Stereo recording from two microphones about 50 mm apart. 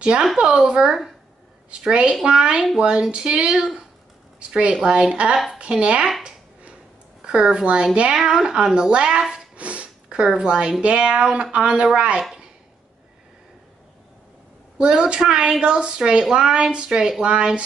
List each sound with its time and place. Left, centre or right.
0.0 s speech: centre
6.6 s a sound: centre
8.2 s speech: centre
9.6 s sniff: right
10.0 s speech: centre
14.8 s speech: centre